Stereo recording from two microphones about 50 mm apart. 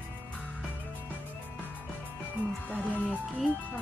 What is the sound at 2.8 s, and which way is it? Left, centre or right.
Music, left.